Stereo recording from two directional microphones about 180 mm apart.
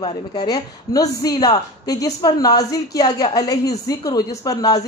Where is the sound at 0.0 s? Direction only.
25° left (ahead or behind).